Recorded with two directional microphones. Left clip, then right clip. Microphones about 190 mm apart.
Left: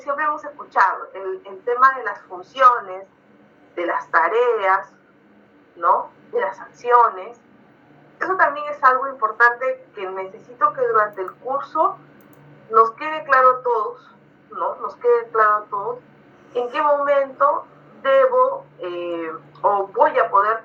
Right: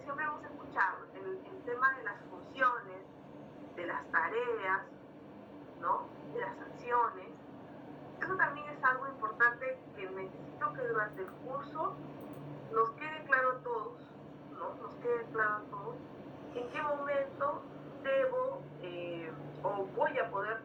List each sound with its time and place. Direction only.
0.0 s a woman's voice: 45° left (ahead or behind)
16.7 s a woman's voice: 50° left (ahead or behind)